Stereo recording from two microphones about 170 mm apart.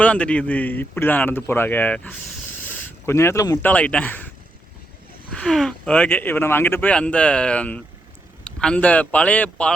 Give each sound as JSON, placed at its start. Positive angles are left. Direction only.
{"t": 0.0, "sound": "speech", "side_deg": 5}
{"t": 2.6, "sound": "a sound", "side_deg": 15}
{"t": 3.7, "sound": "speech", "side_deg": 5}
{"t": 5.3, "sound": "speech", "side_deg": 5}